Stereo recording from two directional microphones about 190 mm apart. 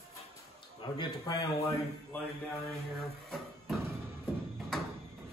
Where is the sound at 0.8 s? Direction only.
25° left (ahead or behind).